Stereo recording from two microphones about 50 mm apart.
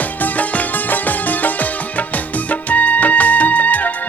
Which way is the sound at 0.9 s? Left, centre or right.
Left.